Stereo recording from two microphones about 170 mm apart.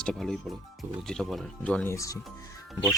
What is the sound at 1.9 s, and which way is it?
Speech, 20° left (ahead or behind).